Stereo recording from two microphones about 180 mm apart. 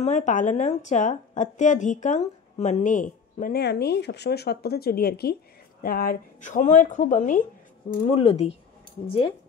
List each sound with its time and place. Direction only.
0.0 s a woman's voice: 40° left (ahead or behind)
3.5 s a woman's voice: 65° left (ahead or behind); by 7.4 s 45° left (ahead or behind)
8.1 s speech: 35° left (ahead or behind)